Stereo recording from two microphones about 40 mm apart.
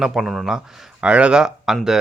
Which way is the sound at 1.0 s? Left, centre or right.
Right.